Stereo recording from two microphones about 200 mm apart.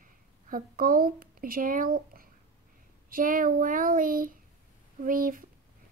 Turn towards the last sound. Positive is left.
turn(degrees=-45)  # may be behind; listen again after turning